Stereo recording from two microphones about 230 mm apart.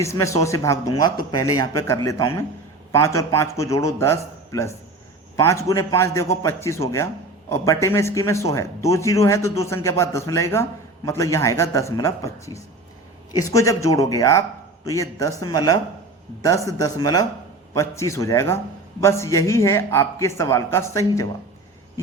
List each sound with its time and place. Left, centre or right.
0.0 s speech: centre